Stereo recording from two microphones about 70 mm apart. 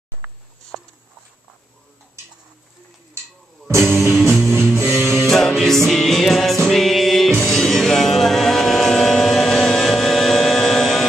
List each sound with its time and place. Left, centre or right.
3.6 s music: right
4.1 s music: centre
4.7 s music: right
5.3 s music: centre